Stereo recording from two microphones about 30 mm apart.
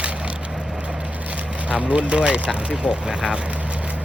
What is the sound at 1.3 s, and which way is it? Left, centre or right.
Speech, right.